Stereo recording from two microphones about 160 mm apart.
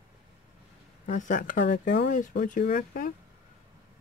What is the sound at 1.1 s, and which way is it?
Speech, 50° left (ahead or behind).